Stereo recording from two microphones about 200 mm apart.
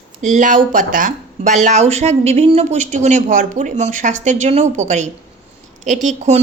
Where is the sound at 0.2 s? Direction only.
40° right (ahead or behind).